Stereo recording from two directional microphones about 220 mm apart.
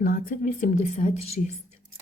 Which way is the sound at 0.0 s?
40° left (ahead or behind).